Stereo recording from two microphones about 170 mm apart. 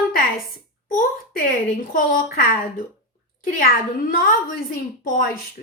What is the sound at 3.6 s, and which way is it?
A woman's voice, 55° left (ahead or behind).